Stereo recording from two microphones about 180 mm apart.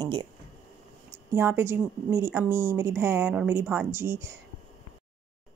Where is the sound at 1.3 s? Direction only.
15° right (ahead or behind).